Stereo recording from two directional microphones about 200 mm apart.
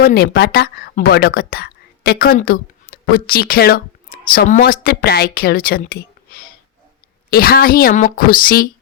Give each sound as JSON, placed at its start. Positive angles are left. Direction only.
{"t": 0.0, "sound": "a woman's voice", "side_deg": 50}